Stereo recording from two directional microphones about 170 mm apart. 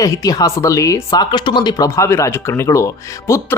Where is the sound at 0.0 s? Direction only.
20° left (ahead or behind).